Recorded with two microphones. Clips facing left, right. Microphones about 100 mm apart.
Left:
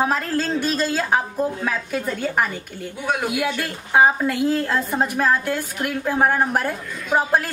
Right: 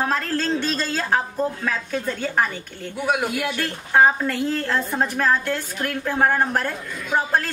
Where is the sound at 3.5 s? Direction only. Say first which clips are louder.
Right 1 dB; 10° left (ahead or behind).